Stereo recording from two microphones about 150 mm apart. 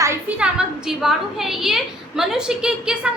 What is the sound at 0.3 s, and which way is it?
A woman's voice, 5° right (ahead or behind).